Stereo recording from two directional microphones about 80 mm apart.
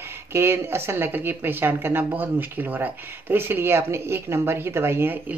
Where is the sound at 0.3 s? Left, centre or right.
Right.